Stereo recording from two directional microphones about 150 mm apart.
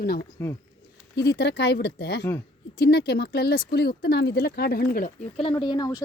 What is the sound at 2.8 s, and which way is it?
Speech, 90° left.